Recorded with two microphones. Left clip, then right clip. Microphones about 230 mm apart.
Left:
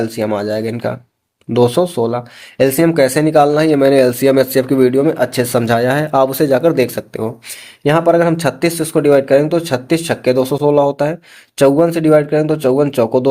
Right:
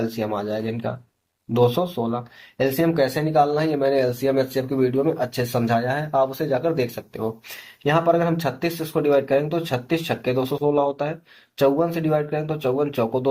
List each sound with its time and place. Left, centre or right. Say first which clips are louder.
0.2 s speech: left 8 dB; left